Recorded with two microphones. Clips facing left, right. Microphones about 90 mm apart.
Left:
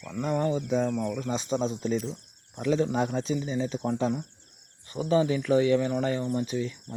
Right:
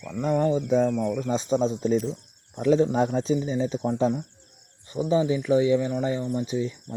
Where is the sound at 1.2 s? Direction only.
35° right (ahead or behind).